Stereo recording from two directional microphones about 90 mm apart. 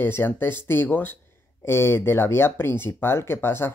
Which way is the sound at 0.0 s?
25° left (ahead or behind).